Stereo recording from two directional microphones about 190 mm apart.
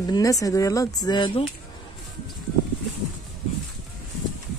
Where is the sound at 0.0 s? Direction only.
20° left (ahead or behind).